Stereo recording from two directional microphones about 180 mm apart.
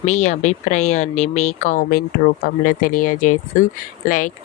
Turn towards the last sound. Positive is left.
turn(degrees=50)  # may be behind; listen again after turning